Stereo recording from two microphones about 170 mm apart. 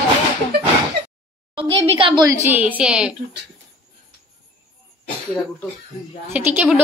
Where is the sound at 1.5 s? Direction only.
30° right (ahead or behind).